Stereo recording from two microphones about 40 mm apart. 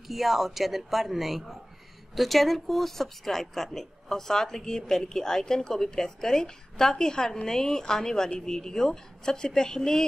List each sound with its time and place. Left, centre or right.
0.1 s a man's voice: centre